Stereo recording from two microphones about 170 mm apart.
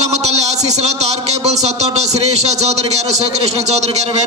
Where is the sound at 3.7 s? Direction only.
40° right (ahead or behind).